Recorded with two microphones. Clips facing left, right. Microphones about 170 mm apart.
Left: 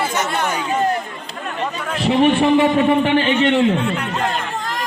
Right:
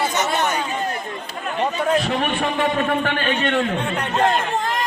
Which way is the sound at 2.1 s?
10° left (ahead or behind).